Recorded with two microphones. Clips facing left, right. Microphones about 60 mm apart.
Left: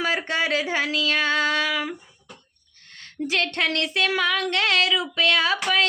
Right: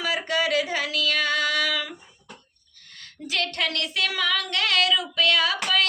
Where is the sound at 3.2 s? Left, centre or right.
Left.